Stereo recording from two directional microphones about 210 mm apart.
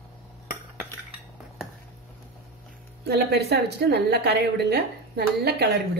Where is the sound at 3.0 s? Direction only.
50° right (ahead or behind).